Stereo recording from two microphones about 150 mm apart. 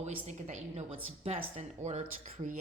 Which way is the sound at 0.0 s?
50° right (ahead or behind).